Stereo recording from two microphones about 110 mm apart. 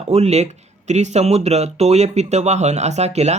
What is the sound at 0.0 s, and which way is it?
Speech, 75° right (ahead or behind).